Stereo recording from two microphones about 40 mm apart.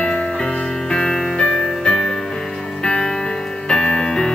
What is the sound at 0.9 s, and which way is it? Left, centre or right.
Music, centre.